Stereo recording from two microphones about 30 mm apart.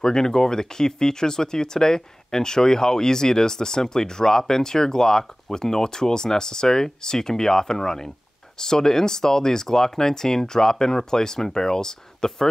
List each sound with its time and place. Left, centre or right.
0.0 s speech: centre